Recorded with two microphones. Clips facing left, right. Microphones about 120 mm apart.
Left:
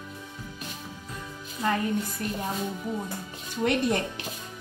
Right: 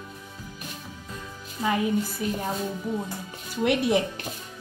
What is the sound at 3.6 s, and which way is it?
Speech, 5° right (ahead or behind).